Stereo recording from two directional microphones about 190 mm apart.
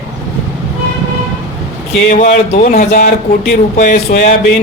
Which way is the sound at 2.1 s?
40° left (ahead or behind).